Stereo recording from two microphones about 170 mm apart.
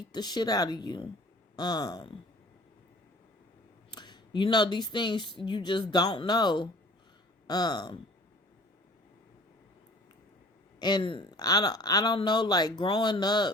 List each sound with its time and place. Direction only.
0.1 s speech: 25° left (ahead or behind)
3.9 s speech: 25° left (ahead or behind)
10.8 s speech: 25° left (ahead or behind)